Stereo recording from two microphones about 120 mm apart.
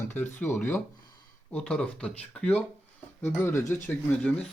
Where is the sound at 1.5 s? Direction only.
5° left (ahead or behind).